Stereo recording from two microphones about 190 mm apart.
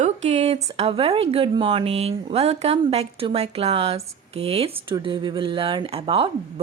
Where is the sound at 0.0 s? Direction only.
35° right (ahead or behind).